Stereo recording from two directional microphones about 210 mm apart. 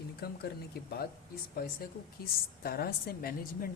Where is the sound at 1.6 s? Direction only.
45° left (ahead or behind).